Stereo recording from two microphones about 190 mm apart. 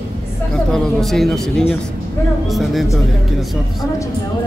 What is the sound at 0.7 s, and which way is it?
Speech, 5° left (ahead or behind).